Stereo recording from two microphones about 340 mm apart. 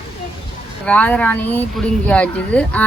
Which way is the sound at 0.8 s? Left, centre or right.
Centre.